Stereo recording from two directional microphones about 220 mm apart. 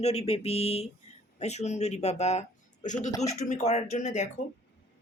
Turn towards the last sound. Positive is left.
turn(degrees=30)  # may be behind; listen again after turning